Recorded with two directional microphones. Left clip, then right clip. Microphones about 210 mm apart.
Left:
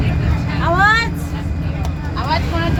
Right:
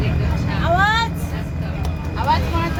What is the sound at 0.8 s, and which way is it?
Vehicle, 20° left (ahead or behind).